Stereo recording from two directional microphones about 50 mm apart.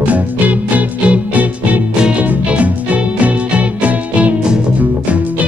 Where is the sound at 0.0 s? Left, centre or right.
Right.